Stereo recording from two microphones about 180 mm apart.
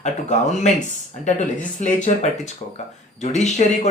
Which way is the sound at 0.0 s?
40° left (ahead or behind).